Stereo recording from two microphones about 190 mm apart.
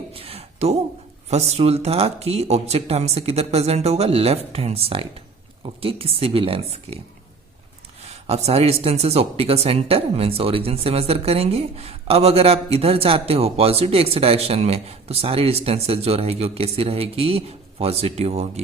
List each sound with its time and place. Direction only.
0.1 s a sound: 30° right (ahead or behind)
1.3 s speech: 35° right (ahead or behind)
8.0 s speech: 35° right (ahead or behind)